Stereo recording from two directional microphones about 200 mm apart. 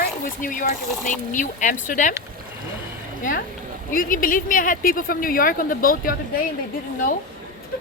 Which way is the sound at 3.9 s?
45° left (ahead or behind).